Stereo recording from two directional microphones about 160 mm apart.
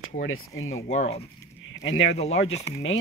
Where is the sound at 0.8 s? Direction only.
40° left (ahead or behind).